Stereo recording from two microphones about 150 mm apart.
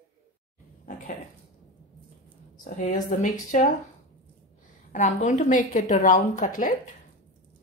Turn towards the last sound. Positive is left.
turn(degrees=65)  # may be behind; listen again after turning